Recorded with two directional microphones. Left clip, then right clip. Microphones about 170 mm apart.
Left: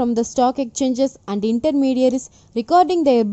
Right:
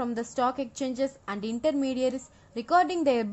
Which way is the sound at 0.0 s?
30° left (ahead or behind).